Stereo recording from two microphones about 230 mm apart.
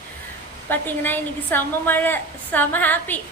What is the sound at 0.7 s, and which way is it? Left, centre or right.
Female singing, centre.